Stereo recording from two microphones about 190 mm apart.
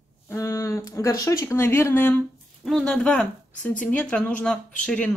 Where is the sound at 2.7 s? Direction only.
Centre (ahead or behind).